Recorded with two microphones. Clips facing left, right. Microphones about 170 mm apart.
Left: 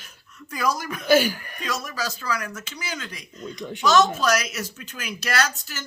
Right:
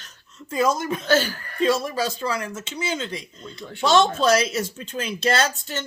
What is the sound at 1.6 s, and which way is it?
Speech, 30° right (ahead or behind).